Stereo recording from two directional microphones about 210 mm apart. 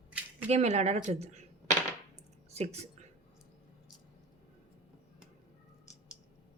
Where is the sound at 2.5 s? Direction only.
30° right (ahead or behind).